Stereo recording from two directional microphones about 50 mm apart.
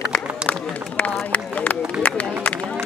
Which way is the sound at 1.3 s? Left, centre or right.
Left.